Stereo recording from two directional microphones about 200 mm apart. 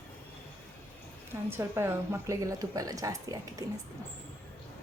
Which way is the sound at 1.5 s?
10° right (ahead or behind).